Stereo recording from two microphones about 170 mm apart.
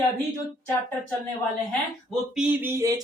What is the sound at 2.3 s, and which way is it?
Speech, 15° right (ahead or behind).